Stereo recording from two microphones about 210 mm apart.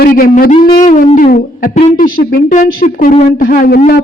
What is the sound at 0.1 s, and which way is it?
Speech, 40° left (ahead or behind).